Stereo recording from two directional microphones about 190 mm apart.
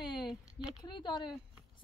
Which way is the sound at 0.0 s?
25° left (ahead or behind).